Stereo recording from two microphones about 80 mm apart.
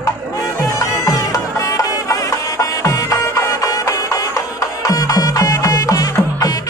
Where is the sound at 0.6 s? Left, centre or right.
Left.